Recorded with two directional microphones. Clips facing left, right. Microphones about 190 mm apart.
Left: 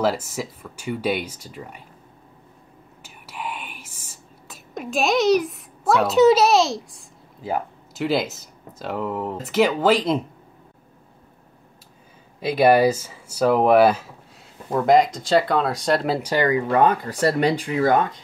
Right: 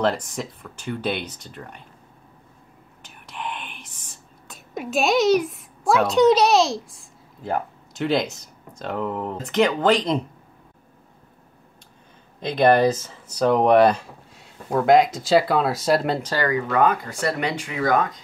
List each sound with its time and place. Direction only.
0.0 s speech: 5° left (ahead or behind)
3.0 s whispering: 5° left (ahead or behind)
4.7 s a woman's voice: centre (ahead or behind)
12.4 s speech: 10° left (ahead or behind)
16.2 s speech: 10° left (ahead or behind)
16.4 s speech: 25° left (ahead or behind)